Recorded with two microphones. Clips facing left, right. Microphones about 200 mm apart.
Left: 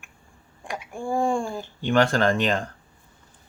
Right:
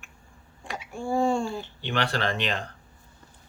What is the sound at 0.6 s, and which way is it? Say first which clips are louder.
Speech: left 1 dB; 15° left (ahead or behind).